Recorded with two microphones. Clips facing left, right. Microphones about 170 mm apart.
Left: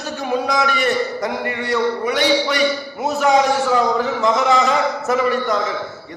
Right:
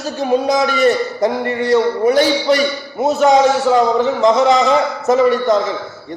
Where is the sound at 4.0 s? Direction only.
20° right (ahead or behind).